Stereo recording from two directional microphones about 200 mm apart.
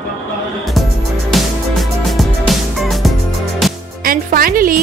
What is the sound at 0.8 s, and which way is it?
Music, centre (ahead or behind).